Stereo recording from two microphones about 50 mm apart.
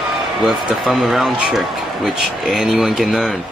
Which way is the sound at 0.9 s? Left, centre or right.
Centre.